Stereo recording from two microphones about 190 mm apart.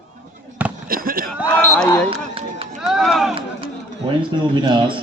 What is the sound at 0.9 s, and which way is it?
Fireworks, 50° right (ahead or behind).